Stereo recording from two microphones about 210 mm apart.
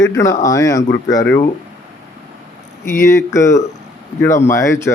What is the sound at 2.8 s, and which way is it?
Speech, 15° left (ahead or behind).